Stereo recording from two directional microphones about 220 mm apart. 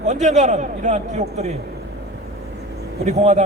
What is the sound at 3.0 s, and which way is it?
Speech, 30° right (ahead or behind).